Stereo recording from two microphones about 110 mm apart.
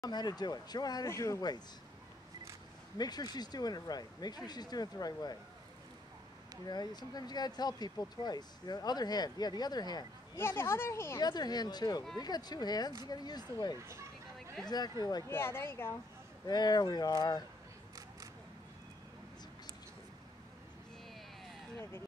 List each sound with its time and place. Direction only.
0.0 s speech: 40° left (ahead or behind)
1.0 s speech: 25° left (ahead or behind)
3.0 s speech: 40° left (ahead or behind)
6.6 s speech: 40° left (ahead or behind)
10.3 s speech: 25° left (ahead or behind)
11.1 s speech: 40° left (ahead or behind)
15.2 s speech: 20° left (ahead or behind)
16.4 s speech: 40° left (ahead or behind)